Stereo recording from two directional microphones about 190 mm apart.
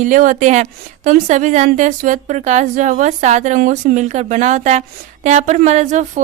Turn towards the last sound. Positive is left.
turn(degrees=-40)  # may be behind; listen again after turning